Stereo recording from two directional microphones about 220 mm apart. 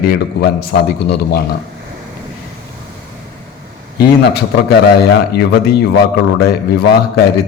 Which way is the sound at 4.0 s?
45° left (ahead or behind).